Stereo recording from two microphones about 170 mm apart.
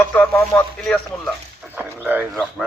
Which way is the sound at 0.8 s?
Centre (ahead or behind).